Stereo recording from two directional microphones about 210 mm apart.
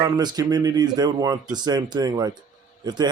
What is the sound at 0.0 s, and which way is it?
Speech, 20° right (ahead or behind).